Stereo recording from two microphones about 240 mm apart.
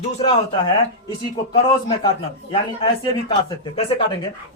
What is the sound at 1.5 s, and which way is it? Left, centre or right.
Speech, centre.